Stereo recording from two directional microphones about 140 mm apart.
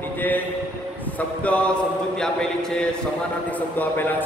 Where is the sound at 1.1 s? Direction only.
10° left (ahead or behind).